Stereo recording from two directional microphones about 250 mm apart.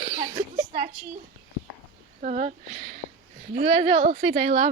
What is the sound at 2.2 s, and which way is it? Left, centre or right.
Speech, right.